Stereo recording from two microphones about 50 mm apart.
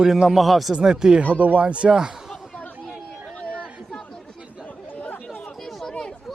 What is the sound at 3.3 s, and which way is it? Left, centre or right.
Chatter, left.